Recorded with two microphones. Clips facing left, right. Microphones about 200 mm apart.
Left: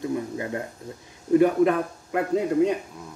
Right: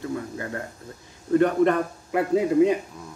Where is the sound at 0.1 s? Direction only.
20° left (ahead or behind).